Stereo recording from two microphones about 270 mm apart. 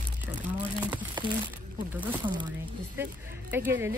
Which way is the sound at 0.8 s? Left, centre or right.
Centre.